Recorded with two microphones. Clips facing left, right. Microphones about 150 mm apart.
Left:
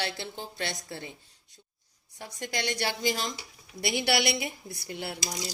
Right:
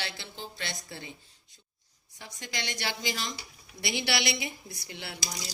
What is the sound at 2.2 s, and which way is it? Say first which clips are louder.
A woman's voice: left 5 dB; 50° left (ahead or behind).